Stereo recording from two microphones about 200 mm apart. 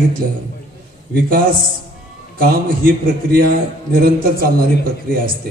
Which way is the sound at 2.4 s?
45° right (ahead or behind).